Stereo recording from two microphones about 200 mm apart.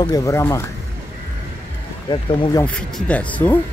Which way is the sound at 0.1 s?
15° left (ahead or behind).